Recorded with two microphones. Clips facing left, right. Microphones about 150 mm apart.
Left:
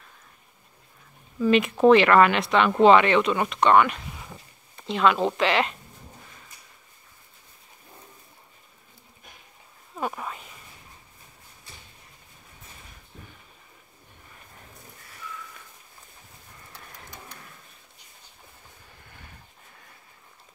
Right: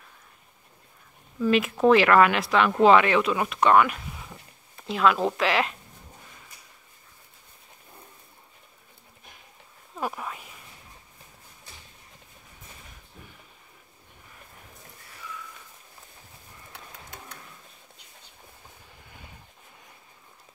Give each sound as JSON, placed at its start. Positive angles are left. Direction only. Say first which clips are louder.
{"t": 1.4, "sound": "speech", "louder": "left 2 dB", "side_deg": 0}
{"t": 9.9, "sound": "speech", "louder": "left 1 dB", "side_deg": 0}
{"t": 16.7, "sound": "a sound", "louder": "right 1 dB", "side_deg": -60}